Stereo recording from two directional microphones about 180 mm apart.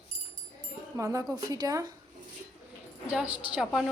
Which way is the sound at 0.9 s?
20° right (ahead or behind).